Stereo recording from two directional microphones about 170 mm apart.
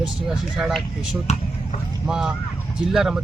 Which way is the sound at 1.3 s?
40° left (ahead or behind).